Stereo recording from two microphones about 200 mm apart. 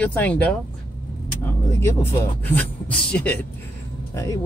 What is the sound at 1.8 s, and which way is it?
Speech, 10° left (ahead or behind).